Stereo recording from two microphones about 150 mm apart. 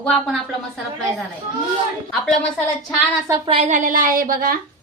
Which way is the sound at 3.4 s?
40° right (ahead or behind).